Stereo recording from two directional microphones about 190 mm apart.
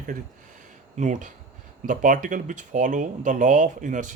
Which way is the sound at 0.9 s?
40° right (ahead or behind).